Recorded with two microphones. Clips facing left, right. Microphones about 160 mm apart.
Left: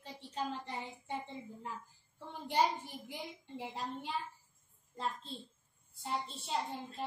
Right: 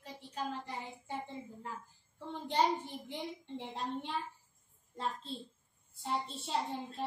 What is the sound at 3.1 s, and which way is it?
A woman's voice, 5° left (ahead or behind).